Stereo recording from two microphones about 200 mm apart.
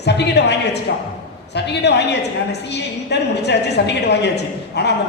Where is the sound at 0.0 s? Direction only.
55° left (ahead or behind).